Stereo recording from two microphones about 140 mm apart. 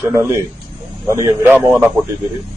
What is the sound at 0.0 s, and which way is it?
A man's voice, 20° right (ahead or behind).